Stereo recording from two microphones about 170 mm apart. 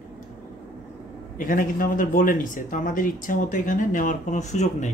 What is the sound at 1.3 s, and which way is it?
Speech, 55° left (ahead or behind).